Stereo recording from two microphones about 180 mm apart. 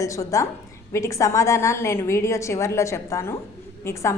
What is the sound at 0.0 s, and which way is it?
A woman's voice, 15° left (ahead or behind).